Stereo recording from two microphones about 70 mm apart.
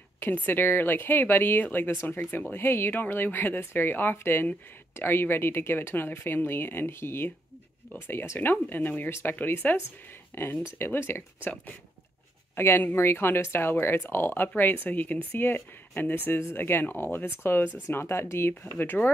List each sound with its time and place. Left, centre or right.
0.2 s speech: left
12.5 s speech: left